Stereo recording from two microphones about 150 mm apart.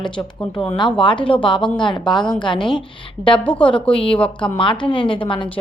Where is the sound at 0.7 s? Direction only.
30° left (ahead or behind).